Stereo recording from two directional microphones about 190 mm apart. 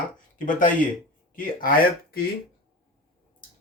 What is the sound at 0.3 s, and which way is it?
Speech, 45° left (ahead or behind).